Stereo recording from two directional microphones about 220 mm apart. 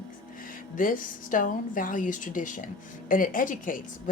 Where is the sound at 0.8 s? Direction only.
40° left (ahead or behind).